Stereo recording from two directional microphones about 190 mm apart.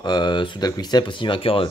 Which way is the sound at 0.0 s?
25° left (ahead or behind).